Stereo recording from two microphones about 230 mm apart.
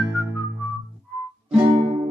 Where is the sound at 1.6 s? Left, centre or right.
Right.